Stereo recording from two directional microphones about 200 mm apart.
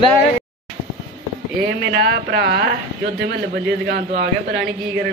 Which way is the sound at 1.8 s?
50° right (ahead or behind).